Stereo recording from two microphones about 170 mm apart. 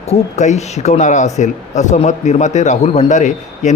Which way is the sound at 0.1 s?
40° left (ahead or behind).